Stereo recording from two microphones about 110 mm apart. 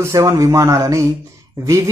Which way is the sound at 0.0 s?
30° right (ahead or behind).